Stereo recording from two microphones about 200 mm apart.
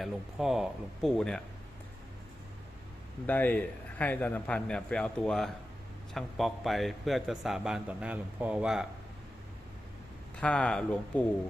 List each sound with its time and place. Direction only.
0.0 s a man's voice: centre (ahead or behind)
3.2 s a man's voice: 10° left (ahead or behind)
10.3 s a man's voice: 5° left (ahead or behind)